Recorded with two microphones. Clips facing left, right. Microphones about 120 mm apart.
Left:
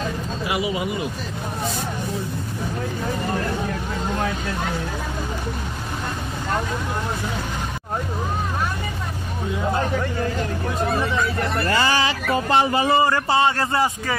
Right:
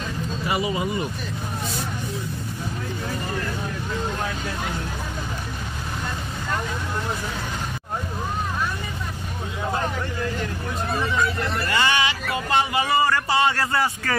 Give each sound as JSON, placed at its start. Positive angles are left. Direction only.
{"t": 0.5, "sound": "speech", "side_deg": 10}
{"t": 11.6, "sound": "speech", "side_deg": 35}